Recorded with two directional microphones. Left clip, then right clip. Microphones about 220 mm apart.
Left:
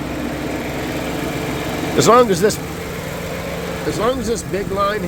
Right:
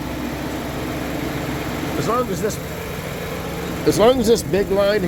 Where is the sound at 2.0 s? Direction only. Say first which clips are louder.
Left 10 dB; 45° left (ahead or behind).